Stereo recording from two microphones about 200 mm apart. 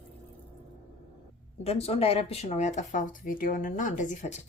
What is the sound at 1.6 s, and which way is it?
Speech, 30° left (ahead or behind).